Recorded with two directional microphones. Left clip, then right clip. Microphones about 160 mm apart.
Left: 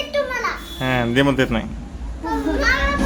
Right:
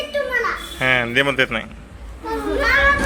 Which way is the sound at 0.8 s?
5° left (ahead or behind).